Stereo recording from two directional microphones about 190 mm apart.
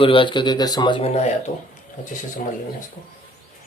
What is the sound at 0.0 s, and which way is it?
Speech, 25° left (ahead or behind).